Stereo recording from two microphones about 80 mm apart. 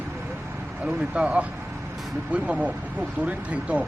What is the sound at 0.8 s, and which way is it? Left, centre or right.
Speech, centre.